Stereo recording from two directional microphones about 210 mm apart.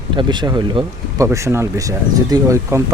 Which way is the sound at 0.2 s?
20° right (ahead or behind).